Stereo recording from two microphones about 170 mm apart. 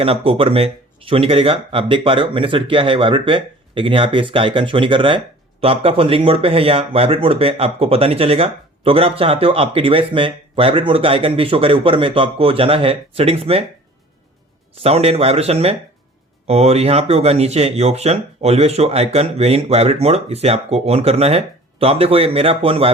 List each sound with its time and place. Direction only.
0.0 s speech: 35° right (ahead or behind)
14.8 s speech: 35° right (ahead or behind)